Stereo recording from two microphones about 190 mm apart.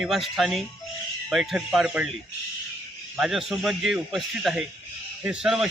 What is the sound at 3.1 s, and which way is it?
A man's voice, centre (ahead or behind).